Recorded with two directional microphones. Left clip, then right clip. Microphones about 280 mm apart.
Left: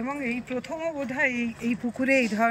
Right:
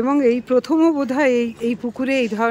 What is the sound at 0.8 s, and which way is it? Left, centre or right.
Speech, centre.